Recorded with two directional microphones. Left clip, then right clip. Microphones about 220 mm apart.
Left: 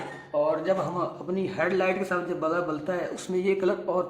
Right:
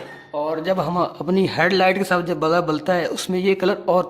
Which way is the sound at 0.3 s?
35° right (ahead or behind).